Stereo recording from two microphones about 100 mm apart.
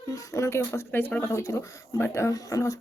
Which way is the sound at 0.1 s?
30° left (ahead or behind).